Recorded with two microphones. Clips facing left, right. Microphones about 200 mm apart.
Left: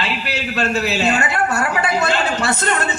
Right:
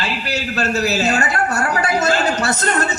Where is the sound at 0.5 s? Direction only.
40° right (ahead or behind).